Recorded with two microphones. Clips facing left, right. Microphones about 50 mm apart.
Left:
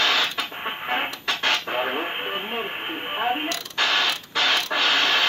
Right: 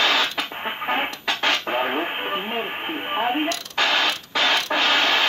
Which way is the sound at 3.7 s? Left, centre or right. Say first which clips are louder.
Right 1 dB; right.